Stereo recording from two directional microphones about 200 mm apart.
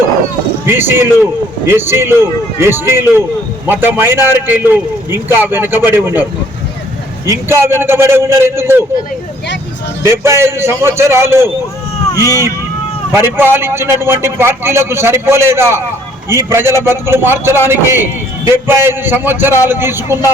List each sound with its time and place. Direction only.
0.6 s a man's voice: 10° right (ahead or behind)
7.3 s a man's voice: 10° right (ahead or behind)
10.0 s a man's voice: 15° right (ahead or behind)
12.1 s speech: 15° left (ahead or behind)
13.1 s a man's voice: 10° right (ahead or behind)